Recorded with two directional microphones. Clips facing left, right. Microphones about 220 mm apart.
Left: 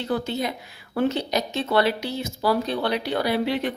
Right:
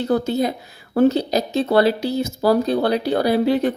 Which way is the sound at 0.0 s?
40° right (ahead or behind).